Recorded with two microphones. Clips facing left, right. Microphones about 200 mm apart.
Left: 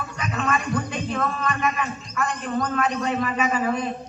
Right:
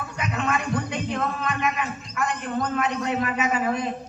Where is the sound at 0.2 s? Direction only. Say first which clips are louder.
Even; 20° right (ahead or behind).